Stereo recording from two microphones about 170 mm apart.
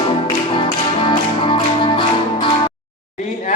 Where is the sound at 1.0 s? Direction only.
30° left (ahead or behind).